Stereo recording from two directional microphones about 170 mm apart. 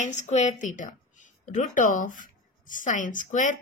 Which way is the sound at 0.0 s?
45° left (ahead or behind).